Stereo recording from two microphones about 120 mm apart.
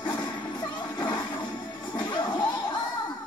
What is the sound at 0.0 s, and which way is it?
Music, 35° left (ahead or behind).